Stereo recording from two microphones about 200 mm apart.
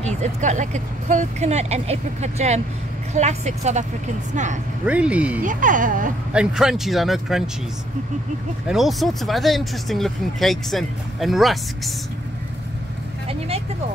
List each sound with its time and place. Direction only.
0.0 s speech: 35° right (ahead or behind)
4.8 s speech: 5° right (ahead or behind)
5.4 s speech: 40° right (ahead or behind)
6.3 s speech: 5° right (ahead or behind)
8.6 s speech: centre (ahead or behind)